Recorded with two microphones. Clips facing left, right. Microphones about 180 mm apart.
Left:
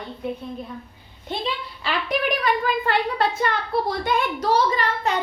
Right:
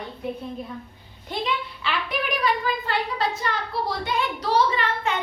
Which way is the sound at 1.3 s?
35° left (ahead or behind).